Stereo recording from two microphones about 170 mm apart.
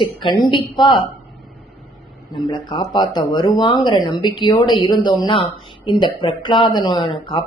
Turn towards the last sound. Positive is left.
turn(degrees=30)  # may be behind; listen again after turning